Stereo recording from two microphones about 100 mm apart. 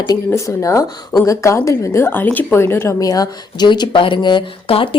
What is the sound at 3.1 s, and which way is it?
A woman's voice, 40° left (ahead or behind).